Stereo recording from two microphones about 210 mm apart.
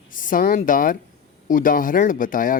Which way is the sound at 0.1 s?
40° left (ahead or behind).